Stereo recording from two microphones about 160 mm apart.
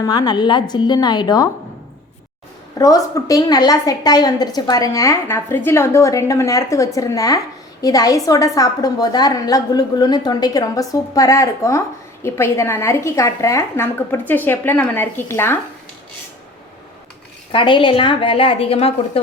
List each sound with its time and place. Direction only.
0.0 s a woman's voice: 25° left (ahead or behind)
2.7 s a woman's voice: 20° left (ahead or behind)
17.5 s speech: 30° left (ahead or behind)